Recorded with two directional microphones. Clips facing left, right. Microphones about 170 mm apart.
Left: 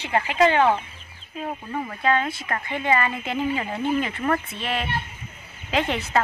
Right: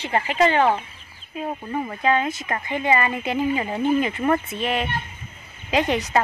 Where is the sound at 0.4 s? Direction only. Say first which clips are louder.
Even; 10° right (ahead or behind).